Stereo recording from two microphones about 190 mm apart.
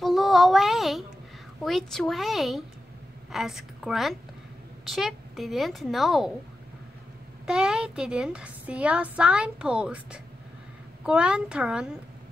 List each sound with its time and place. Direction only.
0.0 s a sound: centre (ahead or behind)
1.6 s a woman's voice: centre (ahead or behind)
7.4 s a woman's voice: 5° right (ahead or behind)